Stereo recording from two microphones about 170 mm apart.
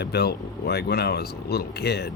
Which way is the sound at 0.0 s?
70° left (ahead or behind).